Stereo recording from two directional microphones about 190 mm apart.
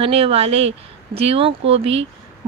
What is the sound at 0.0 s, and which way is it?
A woman's voice, 30° right (ahead or behind).